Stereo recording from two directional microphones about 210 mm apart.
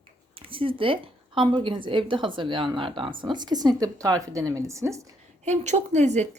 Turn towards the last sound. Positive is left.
turn(degrees=-35)  # may be behind; listen again after turning